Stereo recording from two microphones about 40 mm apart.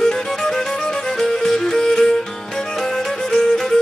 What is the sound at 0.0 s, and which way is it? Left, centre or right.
Music, centre.